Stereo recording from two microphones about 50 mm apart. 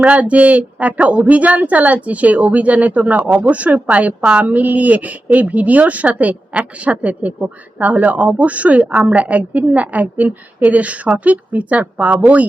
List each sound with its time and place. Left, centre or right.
0.0 s speech: right